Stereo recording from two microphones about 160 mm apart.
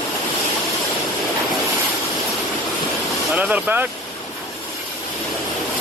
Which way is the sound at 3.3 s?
10° right (ahead or behind).